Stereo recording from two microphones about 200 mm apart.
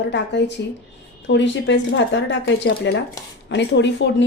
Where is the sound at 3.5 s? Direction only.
60° left (ahead or behind).